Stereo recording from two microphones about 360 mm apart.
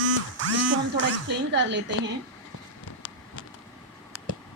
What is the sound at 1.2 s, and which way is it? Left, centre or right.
Speech, right.